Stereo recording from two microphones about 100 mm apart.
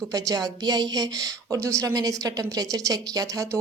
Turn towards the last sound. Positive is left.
turn(degrees=-40)  # may be behind; listen again after turning